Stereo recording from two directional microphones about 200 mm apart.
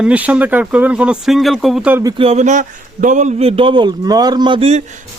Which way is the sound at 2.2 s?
35° right (ahead or behind).